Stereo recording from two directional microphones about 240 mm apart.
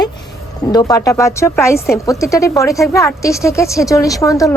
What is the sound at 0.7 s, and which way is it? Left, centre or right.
Speech, centre.